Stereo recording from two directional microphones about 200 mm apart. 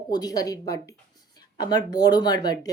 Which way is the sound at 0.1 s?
20° left (ahead or behind).